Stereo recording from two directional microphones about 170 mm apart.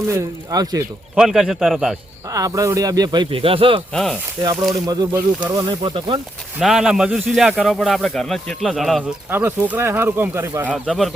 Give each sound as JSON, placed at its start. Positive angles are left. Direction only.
{"t": 0.1, "sound": "speech", "side_deg": -20}
{"t": 1.1, "sound": "speech", "side_deg": -5}
{"t": 2.3, "sound": "speech", "side_deg": -20}
{"t": 3.9, "sound": "speech", "side_deg": 0}
{"t": 4.7, "sound": "speech", "side_deg": -20}
{"t": 5.8, "sound": "speech", "side_deg": -30}
{"t": 6.6, "sound": "speech", "side_deg": 0}
{"t": 9.3, "sound": "speech", "side_deg": -10}
{"t": 10.8, "sound": "speech", "side_deg": 0}